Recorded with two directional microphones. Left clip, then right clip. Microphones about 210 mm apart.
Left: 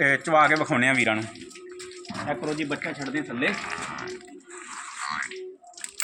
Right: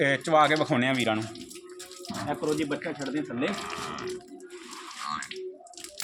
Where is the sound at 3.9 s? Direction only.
45° right (ahead or behind).